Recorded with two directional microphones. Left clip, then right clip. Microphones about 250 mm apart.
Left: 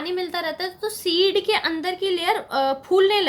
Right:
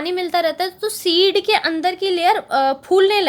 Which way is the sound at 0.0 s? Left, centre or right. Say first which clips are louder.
Right 7 dB; right.